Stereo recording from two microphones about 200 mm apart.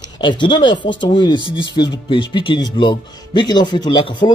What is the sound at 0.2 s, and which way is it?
Speech, 25° left (ahead or behind).